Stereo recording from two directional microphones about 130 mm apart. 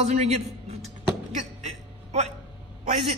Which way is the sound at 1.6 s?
55° right (ahead or behind).